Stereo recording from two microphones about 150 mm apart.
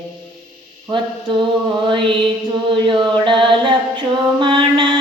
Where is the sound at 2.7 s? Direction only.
30° right (ahead or behind).